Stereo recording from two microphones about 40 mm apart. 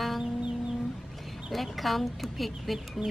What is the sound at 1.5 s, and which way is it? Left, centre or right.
Speech, centre.